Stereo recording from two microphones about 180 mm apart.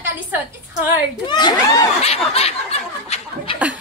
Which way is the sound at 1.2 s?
25° left (ahead or behind).